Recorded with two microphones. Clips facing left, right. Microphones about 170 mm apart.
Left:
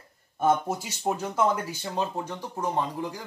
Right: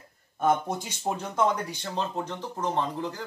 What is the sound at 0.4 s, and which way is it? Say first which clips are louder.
Speech: left 1 dB; 5° left (ahead or behind).